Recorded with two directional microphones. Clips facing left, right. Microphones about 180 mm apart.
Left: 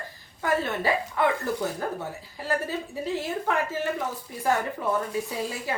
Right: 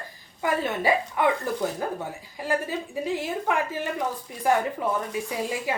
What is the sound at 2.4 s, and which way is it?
Speech, 15° right (ahead or behind).